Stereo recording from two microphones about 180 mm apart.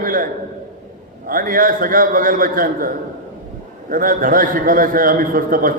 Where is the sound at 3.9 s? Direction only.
50° right (ahead or behind).